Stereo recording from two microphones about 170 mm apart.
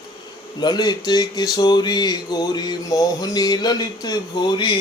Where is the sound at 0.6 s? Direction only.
25° left (ahead or behind).